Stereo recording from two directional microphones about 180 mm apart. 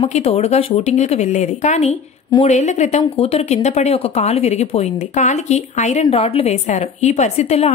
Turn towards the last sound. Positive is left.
turn(degrees=35)  # may be behind; listen again after turning